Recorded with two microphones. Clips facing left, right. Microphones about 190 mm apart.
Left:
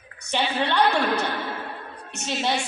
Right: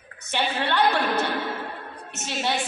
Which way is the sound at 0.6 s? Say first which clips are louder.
Left 1 dB; 15° left (ahead or behind).